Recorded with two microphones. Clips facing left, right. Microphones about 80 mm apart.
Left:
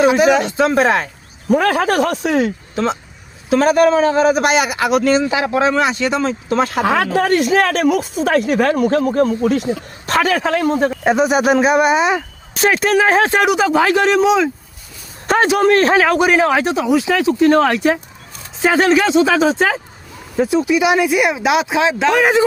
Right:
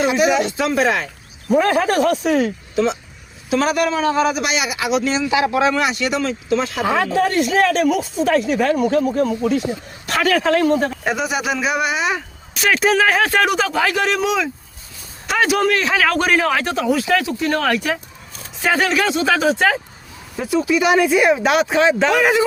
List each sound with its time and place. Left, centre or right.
0.0 s a man's voice: left
1.5 s speech: left
2.3 s a man's voice: left
5.3 s a man's voice: left
6.5 s speech: left
10.1 s speech: left
10.5 s speech: centre
11.0 s speech: left
11.3 s a man's voice: left
15.3 s a sound: left
15.7 s a man's voice: left
16.0 s speech: centre
20.9 s speech: centre
22.2 s speech: left